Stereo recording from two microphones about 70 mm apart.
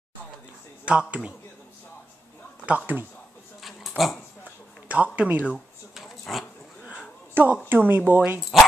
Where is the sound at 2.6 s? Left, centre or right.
Centre.